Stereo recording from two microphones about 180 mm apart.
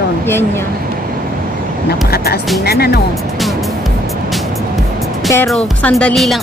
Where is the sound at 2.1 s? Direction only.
60° left (ahead or behind).